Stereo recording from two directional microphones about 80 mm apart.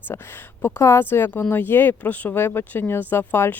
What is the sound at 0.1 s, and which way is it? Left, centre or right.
Speech, left.